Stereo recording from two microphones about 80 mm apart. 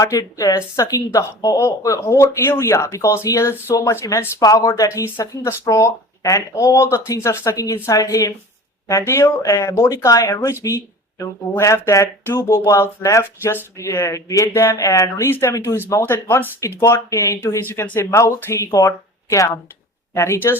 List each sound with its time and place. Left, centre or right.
0.0 s speech: left
4.4 s speech: left
4.9 s speech: left
13.2 s speech: left
13.7 s speech: left
15.3 s speech: left